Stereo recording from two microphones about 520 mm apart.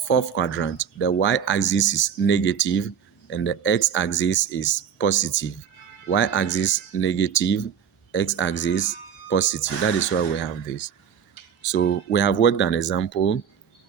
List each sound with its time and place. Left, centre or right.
0.0 s speech: left
11.7 s speech: left